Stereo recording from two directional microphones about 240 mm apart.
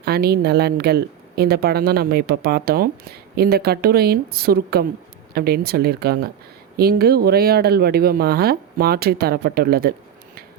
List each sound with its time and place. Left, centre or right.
0.0 s speech: right